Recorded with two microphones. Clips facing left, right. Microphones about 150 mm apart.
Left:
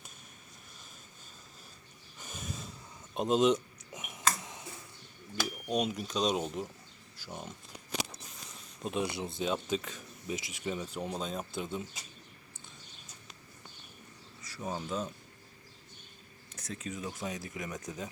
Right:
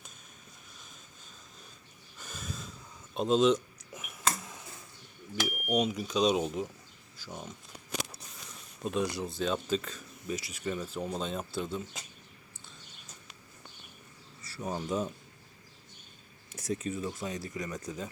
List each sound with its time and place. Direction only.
2.1 s snort: 15° left (ahead or behind)
3.2 s a sound: 15° left (ahead or behind)
5.5 s cash register: 15° right (ahead or behind)
5.7 s speech: 5° right (ahead or behind)
7.2 s speech: 10° left (ahead or behind)
8.8 s speech: 20° left (ahead or behind)
9.4 s speech: 10° left (ahead or behind)
11.1 s speech: 5° left (ahead or behind)
11.5 s speech: 20° left (ahead or behind)
14.6 s speech: 10° right (ahead or behind)
16.7 s speech: 5° right (ahead or behind)